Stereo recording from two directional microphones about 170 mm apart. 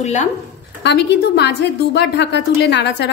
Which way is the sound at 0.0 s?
45° left (ahead or behind).